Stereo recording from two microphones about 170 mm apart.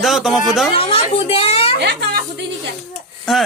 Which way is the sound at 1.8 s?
75° right (ahead or behind).